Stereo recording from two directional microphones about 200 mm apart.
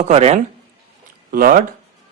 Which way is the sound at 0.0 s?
35° right (ahead or behind).